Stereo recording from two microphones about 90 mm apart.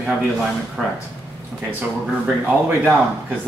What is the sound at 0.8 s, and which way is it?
Speech, 5° right (ahead or behind).